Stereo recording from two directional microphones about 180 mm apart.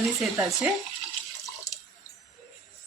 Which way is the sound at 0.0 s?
Centre (ahead or behind).